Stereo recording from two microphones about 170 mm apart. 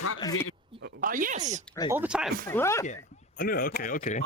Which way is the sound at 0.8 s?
70° right (ahead or behind).